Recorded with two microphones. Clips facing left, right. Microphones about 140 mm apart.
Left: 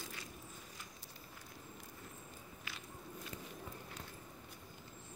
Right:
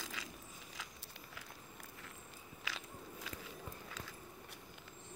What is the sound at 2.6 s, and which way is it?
Walk, 90° right.